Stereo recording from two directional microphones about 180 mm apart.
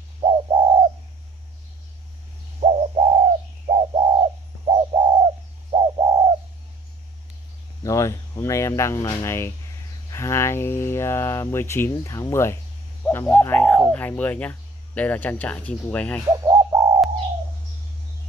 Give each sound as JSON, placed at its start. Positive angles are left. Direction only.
{"t": 0.2, "sound": "bird", "side_deg": -30}
{"t": 2.6, "sound": "bird", "side_deg": -35}
{"t": 7.8, "sound": "speech", "side_deg": 15}
{"t": 13.0, "sound": "bird", "side_deg": 10}
{"t": 13.9, "sound": "speech", "side_deg": 10}
{"t": 16.3, "sound": "bird", "side_deg": -20}